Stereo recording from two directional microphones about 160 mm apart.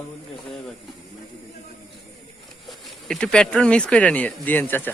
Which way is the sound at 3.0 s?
5° left (ahead or behind).